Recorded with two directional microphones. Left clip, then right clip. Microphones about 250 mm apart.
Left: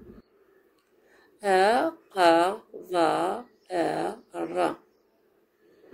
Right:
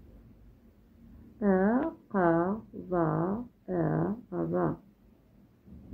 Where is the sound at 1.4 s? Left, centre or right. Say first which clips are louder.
Left 7 dB; left.